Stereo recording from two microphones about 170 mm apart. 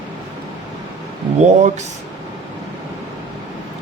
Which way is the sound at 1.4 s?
45° right (ahead or behind).